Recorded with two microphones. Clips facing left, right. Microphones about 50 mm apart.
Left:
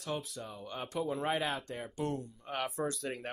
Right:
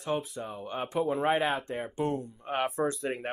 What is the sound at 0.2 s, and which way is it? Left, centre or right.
Speech, right.